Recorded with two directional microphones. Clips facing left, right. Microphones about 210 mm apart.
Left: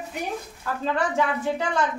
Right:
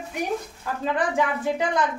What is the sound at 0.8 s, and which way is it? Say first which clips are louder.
A woman's voice: right 1 dB; 15° right (ahead or behind).